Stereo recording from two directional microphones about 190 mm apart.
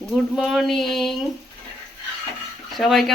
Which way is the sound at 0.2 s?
Centre (ahead or behind).